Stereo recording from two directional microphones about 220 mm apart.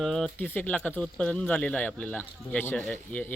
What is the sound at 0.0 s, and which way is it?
Speech, centre (ahead or behind).